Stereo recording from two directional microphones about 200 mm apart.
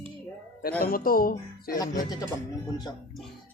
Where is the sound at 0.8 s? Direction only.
45° left (ahead or behind).